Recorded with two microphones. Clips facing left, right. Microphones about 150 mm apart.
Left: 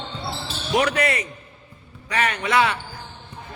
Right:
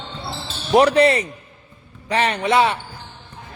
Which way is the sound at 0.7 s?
30° right (ahead or behind).